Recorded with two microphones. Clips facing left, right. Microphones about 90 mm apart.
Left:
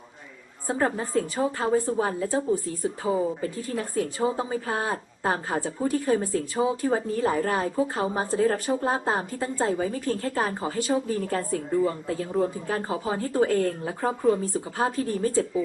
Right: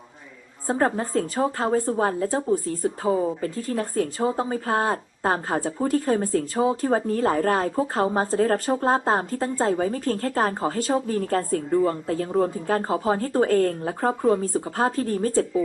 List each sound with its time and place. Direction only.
0.8 s a woman's voice: 40° right (ahead or behind)